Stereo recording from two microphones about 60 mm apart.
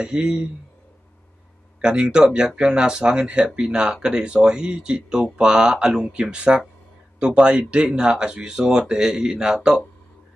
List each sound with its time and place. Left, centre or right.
0.0 s speech: centre
1.8 s speech: centre